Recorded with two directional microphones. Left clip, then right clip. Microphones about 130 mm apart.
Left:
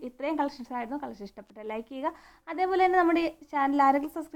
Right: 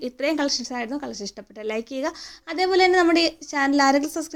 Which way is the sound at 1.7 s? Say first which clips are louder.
Right 5 dB; 30° right (ahead or behind).